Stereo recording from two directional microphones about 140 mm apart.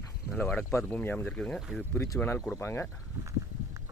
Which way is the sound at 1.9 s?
15° left (ahead or behind).